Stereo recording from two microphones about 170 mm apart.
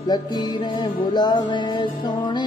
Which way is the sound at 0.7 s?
25° left (ahead or behind).